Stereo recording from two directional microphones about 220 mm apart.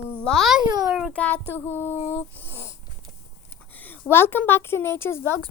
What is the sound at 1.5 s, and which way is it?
Female singing, 10° left (ahead or behind).